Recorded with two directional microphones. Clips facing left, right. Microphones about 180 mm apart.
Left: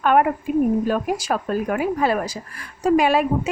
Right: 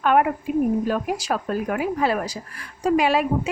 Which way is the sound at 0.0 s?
45° left (ahead or behind).